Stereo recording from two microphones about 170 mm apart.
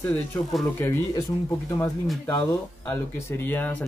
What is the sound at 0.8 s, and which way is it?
Speech, 15° left (ahead or behind).